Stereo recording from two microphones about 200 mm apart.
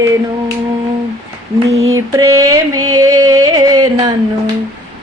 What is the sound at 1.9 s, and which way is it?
Female singing, 15° right (ahead or behind).